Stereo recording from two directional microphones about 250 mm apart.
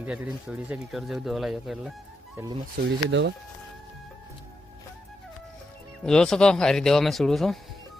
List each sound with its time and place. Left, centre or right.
0.0 s speech: centre
2.3 s speech: centre
2.7 s speech: right
6.1 s speech: centre